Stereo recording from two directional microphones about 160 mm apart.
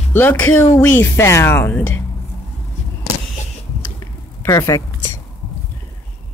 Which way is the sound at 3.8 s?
20° left (ahead or behind).